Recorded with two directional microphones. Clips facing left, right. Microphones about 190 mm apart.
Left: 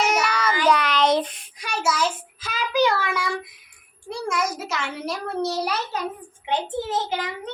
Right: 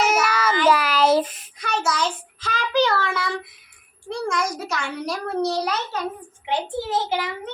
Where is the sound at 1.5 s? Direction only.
10° left (ahead or behind).